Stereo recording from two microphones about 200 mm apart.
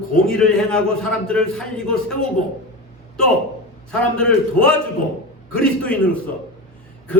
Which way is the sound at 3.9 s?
5° left (ahead or behind).